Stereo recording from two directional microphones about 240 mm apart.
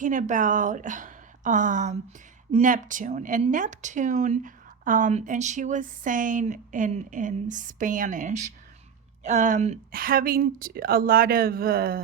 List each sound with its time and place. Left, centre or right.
0.0 s a woman's voice: right